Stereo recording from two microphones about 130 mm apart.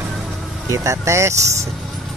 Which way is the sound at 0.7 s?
25° right (ahead or behind).